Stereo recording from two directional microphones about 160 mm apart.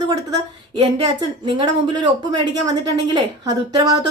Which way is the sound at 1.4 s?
30° right (ahead or behind).